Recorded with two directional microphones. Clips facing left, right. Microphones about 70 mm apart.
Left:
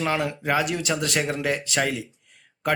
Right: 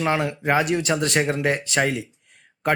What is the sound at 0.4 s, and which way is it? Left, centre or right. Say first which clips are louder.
A man's voice: right 5 dB; right.